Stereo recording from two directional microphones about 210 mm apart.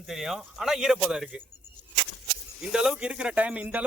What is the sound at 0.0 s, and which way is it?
Speech, centre (ahead or behind).